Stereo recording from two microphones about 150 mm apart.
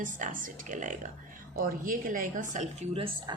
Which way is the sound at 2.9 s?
35° right (ahead or behind).